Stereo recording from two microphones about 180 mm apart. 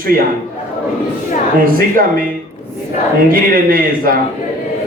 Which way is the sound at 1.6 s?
50° right (ahead or behind).